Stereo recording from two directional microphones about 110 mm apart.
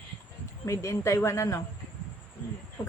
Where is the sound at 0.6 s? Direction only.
25° left (ahead or behind).